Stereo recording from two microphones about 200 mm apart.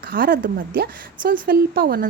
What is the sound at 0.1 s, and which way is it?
Speech, 45° right (ahead or behind).